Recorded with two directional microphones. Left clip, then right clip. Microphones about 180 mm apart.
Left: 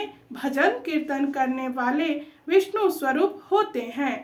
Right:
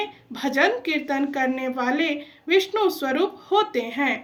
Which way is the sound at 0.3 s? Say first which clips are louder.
Right 2 dB; 20° right (ahead or behind).